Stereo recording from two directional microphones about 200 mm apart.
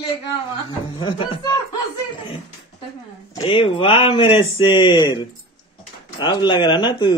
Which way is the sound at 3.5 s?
25° left (ahead or behind).